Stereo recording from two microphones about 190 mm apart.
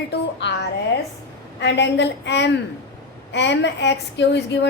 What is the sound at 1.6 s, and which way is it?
A woman's voice, 65° left (ahead or behind).